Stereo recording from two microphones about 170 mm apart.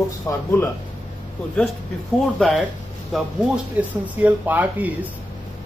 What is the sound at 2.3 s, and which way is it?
Speech, centre (ahead or behind).